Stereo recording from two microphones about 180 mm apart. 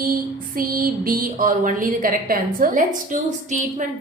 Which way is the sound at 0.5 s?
50° right (ahead or behind).